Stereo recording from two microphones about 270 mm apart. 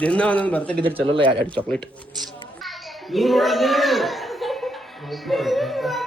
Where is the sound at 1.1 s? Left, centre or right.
Centre.